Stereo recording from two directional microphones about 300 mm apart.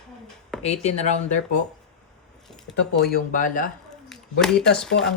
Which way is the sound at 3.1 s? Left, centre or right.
Left.